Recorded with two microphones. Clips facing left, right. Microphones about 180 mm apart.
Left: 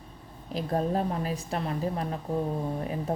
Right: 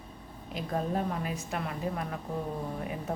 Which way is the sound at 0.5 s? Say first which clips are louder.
Left 4 dB; 35° left (ahead or behind).